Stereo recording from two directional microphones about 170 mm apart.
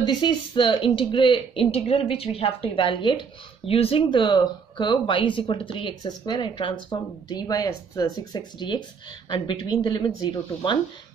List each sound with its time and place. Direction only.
0.0 s speech: 25° left (ahead or behind)